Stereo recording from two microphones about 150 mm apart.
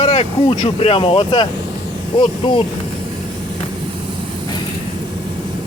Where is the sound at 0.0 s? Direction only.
45° left (ahead or behind).